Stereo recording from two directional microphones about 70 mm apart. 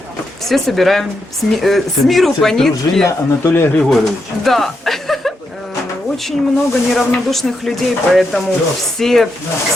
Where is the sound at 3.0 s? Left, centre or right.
Left.